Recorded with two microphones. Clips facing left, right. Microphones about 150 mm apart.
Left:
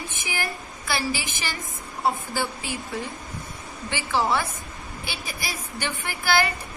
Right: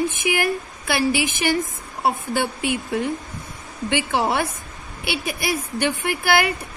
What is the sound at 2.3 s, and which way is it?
Speech, 65° right (ahead or behind).